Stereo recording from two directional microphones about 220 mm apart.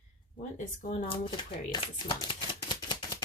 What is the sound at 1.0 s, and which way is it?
Shuffling cards, 25° left (ahead or behind).